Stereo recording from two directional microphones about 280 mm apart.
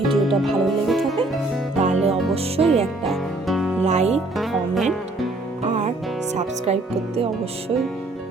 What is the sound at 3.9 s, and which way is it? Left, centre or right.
Speech, right.